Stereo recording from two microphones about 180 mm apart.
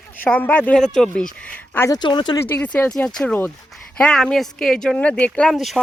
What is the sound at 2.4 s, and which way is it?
Speech, 10° left (ahead or behind).